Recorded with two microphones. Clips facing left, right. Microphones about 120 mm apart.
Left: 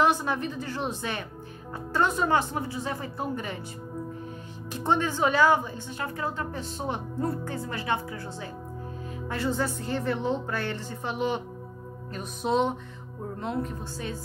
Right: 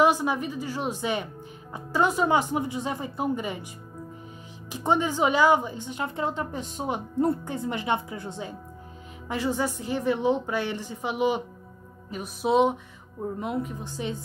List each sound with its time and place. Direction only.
0.0 s speech: 15° right (ahead or behind)
4.7 s speech: 15° right (ahead or behind)